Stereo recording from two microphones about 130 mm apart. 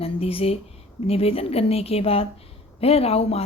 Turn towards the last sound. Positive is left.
turn(degrees=50)  # may be behind; listen again after turning